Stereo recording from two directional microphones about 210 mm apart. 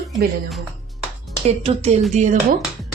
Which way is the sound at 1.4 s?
30° right (ahead or behind).